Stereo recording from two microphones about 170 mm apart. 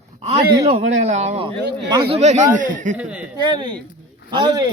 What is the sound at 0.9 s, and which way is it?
Speech, 45° right (ahead or behind).